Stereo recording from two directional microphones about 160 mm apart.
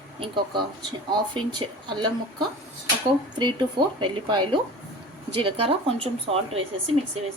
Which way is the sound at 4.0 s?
30° right (ahead or behind).